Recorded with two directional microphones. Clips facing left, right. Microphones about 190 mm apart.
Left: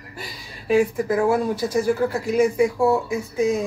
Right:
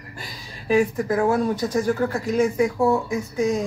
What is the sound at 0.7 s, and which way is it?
Speech, 10° left (ahead or behind).